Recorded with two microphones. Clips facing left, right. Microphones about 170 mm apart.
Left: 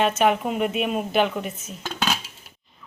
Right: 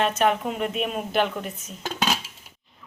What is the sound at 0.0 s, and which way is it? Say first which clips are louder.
A woman's voice: left 2 dB; 5° left (ahead or behind).